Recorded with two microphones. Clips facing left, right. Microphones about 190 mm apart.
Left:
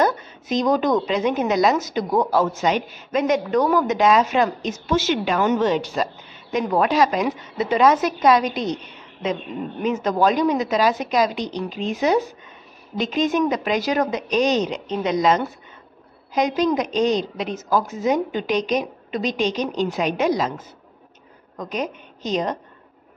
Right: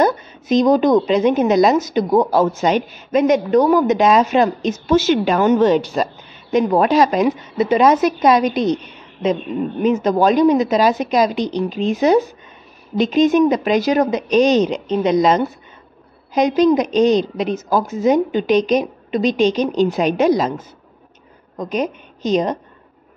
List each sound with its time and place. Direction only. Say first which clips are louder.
0.0 s a woman's voice: right 4 dB; 20° right (ahead or behind)
4.8 s a woman's voice: right 6 dB; 35° right (ahead or behind)
7.2 s a woman's voice: right 6 dB; 20° right (ahead or behind)
21.5 s a woman's voice: right 6 dB; 20° right (ahead or behind)